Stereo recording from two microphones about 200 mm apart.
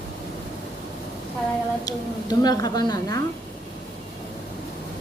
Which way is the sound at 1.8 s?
20° left (ahead or behind).